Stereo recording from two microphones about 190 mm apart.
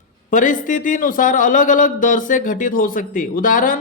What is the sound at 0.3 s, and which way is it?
A man's voice, 45° left (ahead or behind).